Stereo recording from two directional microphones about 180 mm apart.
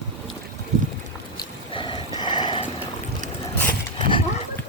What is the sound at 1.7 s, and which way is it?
Vehicle, 25° left (ahead or behind).